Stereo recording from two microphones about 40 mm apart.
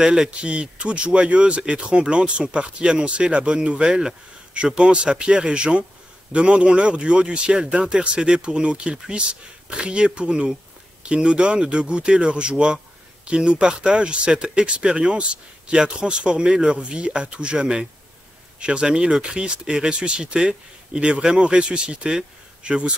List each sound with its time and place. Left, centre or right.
0.0 s speech: centre
0.3 s a man's voice: right